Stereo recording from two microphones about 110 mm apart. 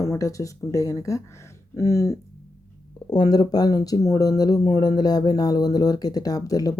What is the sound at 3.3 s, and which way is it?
Speech, 35° left (ahead or behind).